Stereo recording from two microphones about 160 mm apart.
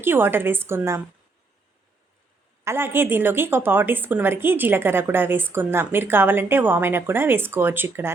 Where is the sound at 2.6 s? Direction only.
15° right (ahead or behind).